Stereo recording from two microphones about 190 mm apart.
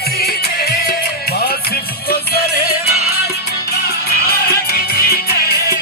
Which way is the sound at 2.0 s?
55° left (ahead or behind).